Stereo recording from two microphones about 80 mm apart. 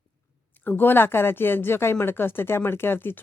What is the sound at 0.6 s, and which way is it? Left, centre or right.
Speech, left.